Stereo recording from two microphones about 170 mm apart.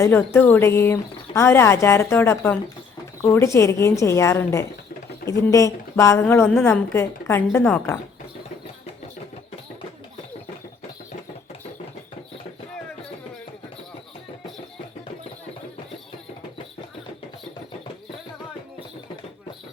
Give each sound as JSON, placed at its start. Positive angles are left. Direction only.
{"t": 0.0, "sound": "speech", "side_deg": 10}